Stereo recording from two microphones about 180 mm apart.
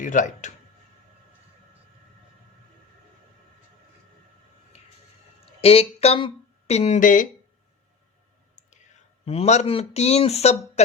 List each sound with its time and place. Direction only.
0.0 s speech: 45° left (ahead or behind)
5.5 s speech: 35° left (ahead or behind)
9.2 s speech: 35° left (ahead or behind)